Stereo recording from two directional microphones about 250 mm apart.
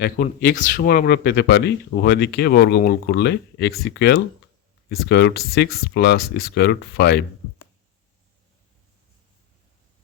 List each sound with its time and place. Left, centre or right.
0.0 s speech: left